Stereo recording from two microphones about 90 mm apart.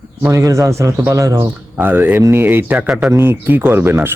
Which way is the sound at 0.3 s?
35° right (ahead or behind).